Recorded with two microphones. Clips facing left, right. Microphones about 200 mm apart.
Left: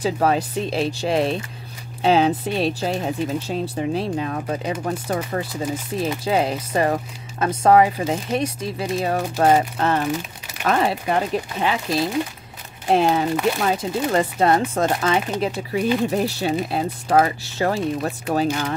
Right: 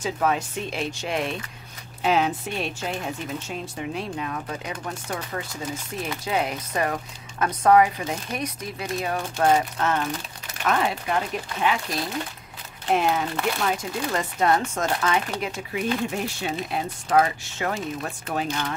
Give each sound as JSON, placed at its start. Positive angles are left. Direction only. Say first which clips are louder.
{"t": 0.0, "sound": "speech", "louder": "left 5 dB", "side_deg": 35}
{"t": 5.9, "sound": "speech", "louder": "left 6 dB", "side_deg": 30}